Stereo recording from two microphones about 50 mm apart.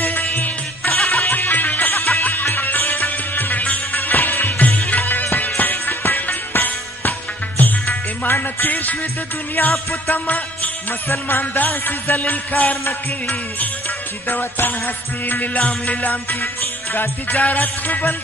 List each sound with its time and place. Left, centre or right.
0.0 s music: left
0.9 s music: centre
1.2 s music: left
10.0 s music: left
11.1 s music: left
11.5 s music: left
13.8 s music: left